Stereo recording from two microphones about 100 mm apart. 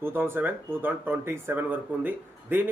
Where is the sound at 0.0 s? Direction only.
25° right (ahead or behind).